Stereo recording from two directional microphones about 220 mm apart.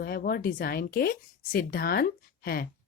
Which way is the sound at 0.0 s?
40° left (ahead or behind).